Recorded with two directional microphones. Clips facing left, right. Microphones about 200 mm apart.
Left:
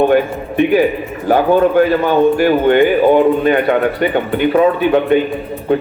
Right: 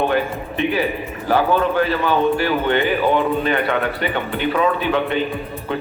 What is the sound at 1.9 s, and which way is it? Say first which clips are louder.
A man's voice: left 6 dB; 45° left (ahead or behind).